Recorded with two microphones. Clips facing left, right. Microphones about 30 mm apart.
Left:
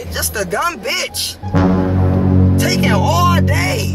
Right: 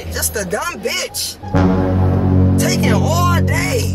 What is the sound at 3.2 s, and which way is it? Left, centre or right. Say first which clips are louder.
Speech: left 2 dB; left.